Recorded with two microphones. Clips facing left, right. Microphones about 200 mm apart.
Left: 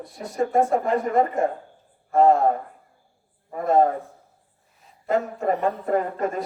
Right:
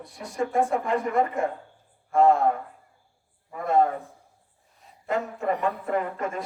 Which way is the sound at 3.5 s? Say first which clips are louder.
Left 3 dB; 40° left (ahead or behind).